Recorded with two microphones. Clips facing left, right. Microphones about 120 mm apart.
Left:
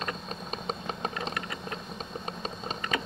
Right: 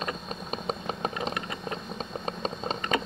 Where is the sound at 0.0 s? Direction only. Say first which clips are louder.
Right 2 dB; 10° right (ahead or behind).